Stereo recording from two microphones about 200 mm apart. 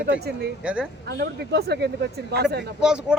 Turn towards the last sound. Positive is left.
turn(degrees=-5)  # may be behind; listen again after turning